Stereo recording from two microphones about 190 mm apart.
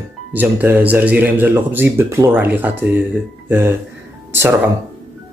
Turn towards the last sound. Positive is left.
turn(degrees=-10)  # may be behind; listen again after turning